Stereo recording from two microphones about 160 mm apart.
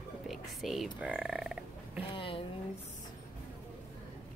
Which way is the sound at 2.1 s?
35° left (ahead or behind).